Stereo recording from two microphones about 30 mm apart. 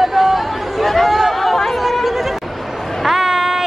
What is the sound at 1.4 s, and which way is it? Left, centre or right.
Chatter, centre.